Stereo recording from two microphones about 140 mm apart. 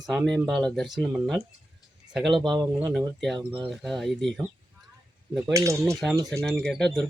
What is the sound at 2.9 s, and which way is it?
Speech, centre (ahead or behind).